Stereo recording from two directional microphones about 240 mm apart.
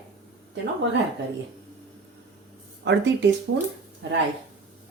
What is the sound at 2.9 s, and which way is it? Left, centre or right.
Speech, right.